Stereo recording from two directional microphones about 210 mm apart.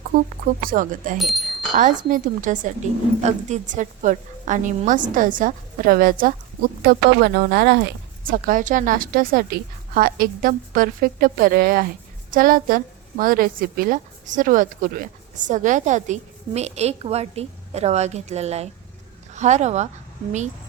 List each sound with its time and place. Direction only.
0.4 s a woman's voice: 40° right (ahead or behind)
1.2 s speech: centre (ahead or behind)
1.7 s a woman's voice: 40° right (ahead or behind)